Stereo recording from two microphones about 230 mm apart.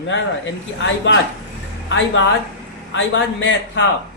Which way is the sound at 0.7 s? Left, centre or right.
Left.